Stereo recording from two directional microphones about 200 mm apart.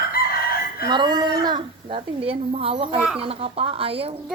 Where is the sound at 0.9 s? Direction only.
20° right (ahead or behind).